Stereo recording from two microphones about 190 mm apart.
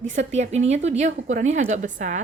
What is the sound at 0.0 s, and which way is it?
Speech, 35° right (ahead or behind).